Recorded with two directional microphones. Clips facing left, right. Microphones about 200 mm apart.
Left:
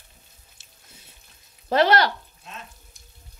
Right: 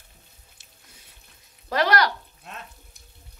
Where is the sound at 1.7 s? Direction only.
25° left (ahead or behind).